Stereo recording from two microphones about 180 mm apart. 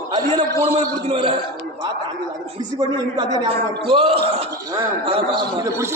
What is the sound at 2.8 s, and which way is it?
A man's voice, 25° right (ahead or behind).